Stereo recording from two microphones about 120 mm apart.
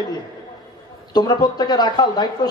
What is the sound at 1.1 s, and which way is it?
A man's voice, 35° left (ahead or behind).